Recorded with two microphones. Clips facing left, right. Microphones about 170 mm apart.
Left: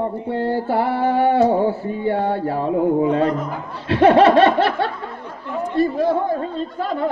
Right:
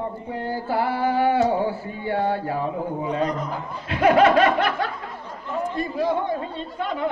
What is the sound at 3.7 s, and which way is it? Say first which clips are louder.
Speech: left 5 dB; 30° left (ahead or behind).